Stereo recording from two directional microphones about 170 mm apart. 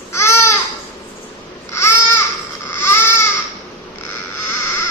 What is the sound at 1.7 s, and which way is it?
Babbling, 15° left (ahead or behind).